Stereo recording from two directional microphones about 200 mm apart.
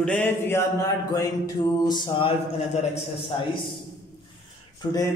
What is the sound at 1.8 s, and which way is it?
Speech, 20° left (ahead or behind).